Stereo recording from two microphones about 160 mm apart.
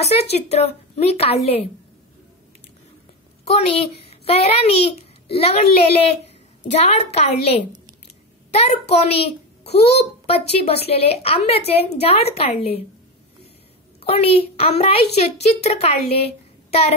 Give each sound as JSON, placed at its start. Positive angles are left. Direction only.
{"t": 0.0, "sound": "a child's voice", "side_deg": 40}
{"t": 3.4, "sound": "a child's voice", "side_deg": 40}
{"t": 14.0, "sound": "a child's voice", "side_deg": 40}